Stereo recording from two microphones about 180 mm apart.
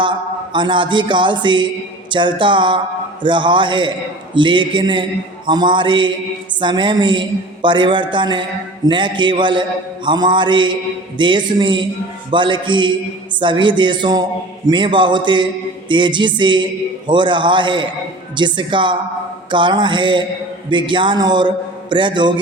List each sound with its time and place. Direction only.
0.0 s a man's voice: 25° right (ahead or behind)